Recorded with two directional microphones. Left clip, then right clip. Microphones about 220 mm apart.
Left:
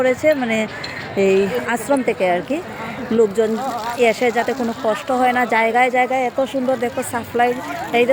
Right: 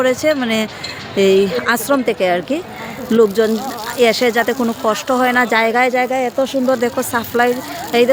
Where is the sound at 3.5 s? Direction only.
25° left (ahead or behind).